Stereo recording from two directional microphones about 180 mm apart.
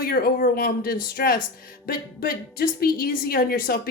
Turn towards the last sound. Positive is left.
turn(degrees=55)  # may be behind; listen again after turning